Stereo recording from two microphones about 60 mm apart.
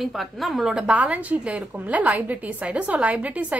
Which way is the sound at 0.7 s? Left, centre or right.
Centre.